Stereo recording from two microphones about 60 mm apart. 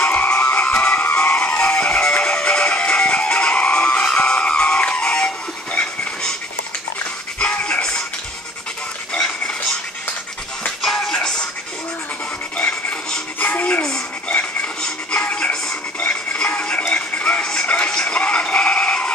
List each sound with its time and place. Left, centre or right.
0.1 s music: left
7.3 s music: centre
10.8 s music: centre
13.4 s music: left